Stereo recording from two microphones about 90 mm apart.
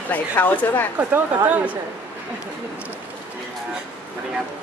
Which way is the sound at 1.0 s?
20° right (ahead or behind).